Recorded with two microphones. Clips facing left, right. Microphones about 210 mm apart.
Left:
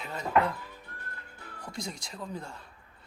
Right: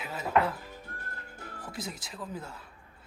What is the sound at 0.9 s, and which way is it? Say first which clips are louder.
Music: right 3 dB; 50° right (ahead or behind).